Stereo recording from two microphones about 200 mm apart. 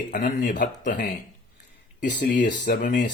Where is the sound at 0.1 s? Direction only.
45° left (ahead or behind).